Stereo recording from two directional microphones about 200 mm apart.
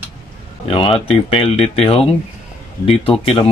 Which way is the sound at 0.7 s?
25° left (ahead or behind).